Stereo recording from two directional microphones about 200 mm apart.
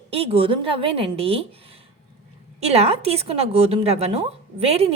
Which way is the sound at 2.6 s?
30° right (ahead or behind).